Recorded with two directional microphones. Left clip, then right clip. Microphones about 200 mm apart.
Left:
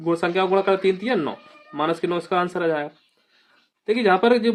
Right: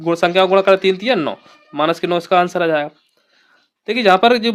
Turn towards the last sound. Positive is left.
turn(degrees=-45)  # may be behind; listen again after turning